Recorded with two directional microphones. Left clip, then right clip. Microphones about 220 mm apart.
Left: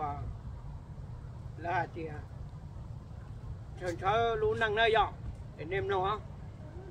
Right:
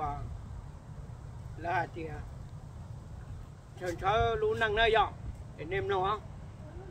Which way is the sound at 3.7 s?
5° right (ahead or behind).